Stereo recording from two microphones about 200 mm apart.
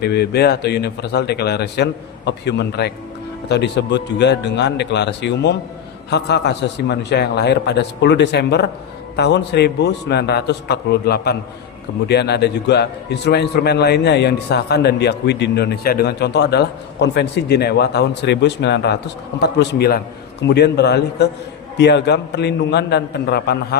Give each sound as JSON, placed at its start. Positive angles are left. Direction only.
{"t": 0.0, "sound": "a man's voice", "side_deg": 55}